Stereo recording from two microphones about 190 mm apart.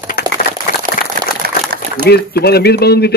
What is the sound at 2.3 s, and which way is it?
Speech, 55° left (ahead or behind).